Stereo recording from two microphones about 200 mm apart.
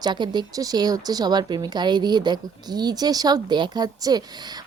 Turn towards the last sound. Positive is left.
turn(degrees=-20)  # may be behind; listen again after turning